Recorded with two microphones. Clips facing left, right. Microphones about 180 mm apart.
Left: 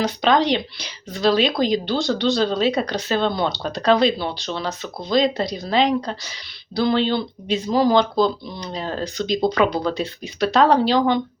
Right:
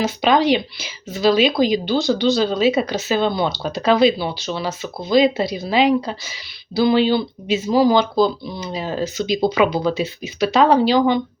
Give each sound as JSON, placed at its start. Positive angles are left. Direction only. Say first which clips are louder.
{"t": 0.0, "sound": "a woman's voice", "louder": "right 2 dB", "side_deg": -5}